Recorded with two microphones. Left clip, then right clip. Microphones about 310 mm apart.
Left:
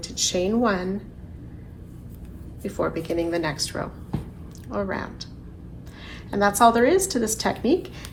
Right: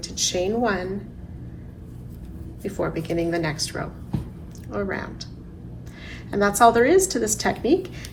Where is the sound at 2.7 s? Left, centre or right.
Centre.